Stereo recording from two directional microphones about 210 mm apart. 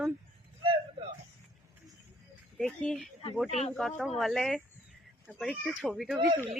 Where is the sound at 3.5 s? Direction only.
30° left (ahead or behind).